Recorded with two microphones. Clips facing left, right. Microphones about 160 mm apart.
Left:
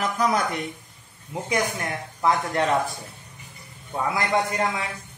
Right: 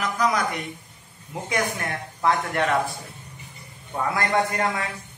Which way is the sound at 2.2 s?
25° left (ahead or behind).